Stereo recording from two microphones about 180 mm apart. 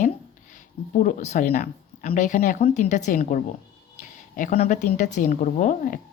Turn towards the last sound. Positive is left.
turn(degrees=45)  # may be behind; listen again after turning